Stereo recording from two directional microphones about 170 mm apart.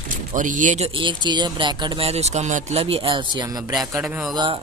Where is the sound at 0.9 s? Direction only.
25° right (ahead or behind).